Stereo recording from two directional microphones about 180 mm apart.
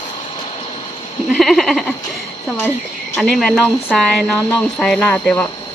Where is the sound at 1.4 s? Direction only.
Centre (ahead or behind).